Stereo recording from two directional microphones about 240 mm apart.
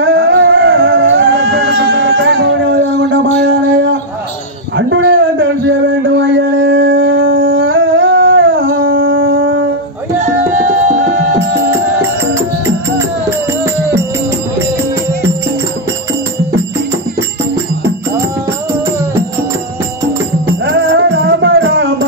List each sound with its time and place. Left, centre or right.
0.0 s music: right
4.7 s a sound: right
11.1 s music: right
12.4 s music: centre
20.6 s music: right